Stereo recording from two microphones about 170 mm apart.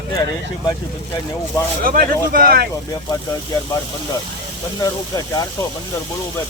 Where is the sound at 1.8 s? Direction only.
55° right (ahead or behind).